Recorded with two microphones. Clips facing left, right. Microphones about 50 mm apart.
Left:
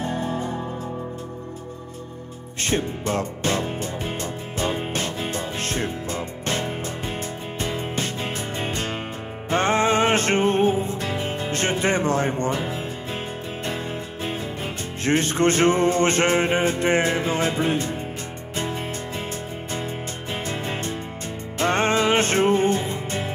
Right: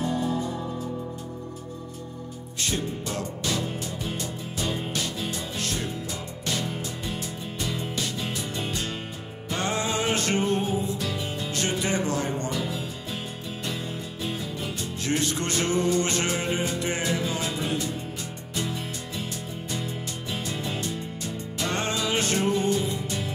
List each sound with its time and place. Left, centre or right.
0.0 s music: left
2.6 s music: left
13.7 s speech: left
18.6 s music: left